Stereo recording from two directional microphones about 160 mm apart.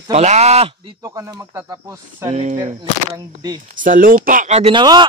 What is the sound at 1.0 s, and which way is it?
Cricket, 20° right (ahead or behind).